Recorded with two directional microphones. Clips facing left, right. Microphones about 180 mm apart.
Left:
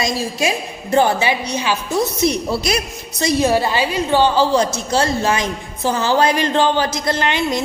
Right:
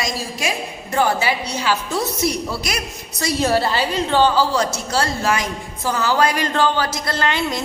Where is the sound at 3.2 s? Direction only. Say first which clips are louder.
Left 3 dB; 15° left (ahead or behind).